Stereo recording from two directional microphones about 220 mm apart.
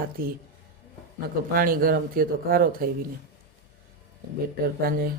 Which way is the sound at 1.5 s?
40° right (ahead or behind).